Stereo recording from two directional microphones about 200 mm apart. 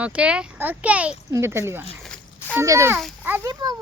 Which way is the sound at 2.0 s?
5° left (ahead or behind).